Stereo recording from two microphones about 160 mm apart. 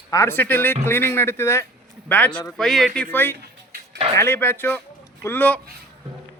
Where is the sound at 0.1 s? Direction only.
15° left (ahead or behind).